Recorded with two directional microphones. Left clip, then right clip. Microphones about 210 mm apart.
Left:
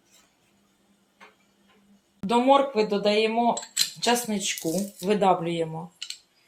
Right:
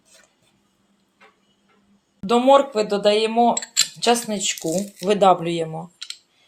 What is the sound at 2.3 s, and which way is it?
Speech, 45° right (ahead or behind).